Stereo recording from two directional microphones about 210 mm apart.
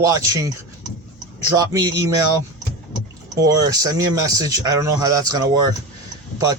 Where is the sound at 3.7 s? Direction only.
15° right (ahead or behind).